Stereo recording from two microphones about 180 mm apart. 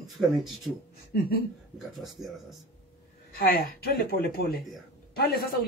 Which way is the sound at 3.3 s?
55° left (ahead or behind).